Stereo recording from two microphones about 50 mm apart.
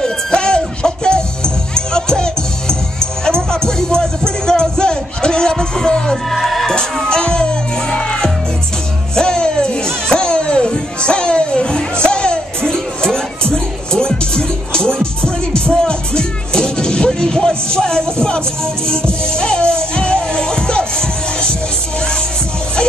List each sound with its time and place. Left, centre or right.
0.0 s music: centre
6.7 s music: centre
10.0 s a sound: centre
11.1 s music: centre
19.2 s crowd: centre